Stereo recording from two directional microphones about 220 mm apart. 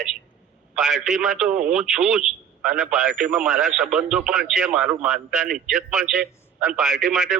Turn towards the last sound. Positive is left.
turn(degrees=-5)  # may be behind; listen again after turning